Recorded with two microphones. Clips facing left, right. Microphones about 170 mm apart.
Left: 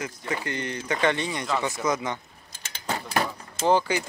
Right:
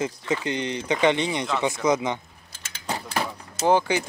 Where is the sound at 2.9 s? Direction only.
15° right (ahead or behind).